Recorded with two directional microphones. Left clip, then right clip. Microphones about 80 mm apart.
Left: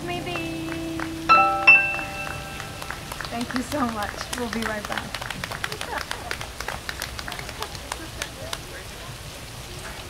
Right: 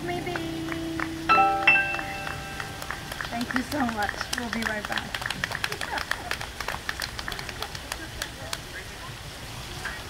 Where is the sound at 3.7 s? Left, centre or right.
Centre.